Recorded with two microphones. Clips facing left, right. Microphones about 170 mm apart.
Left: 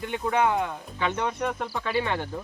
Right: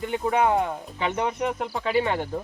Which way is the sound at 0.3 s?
35° right (ahead or behind).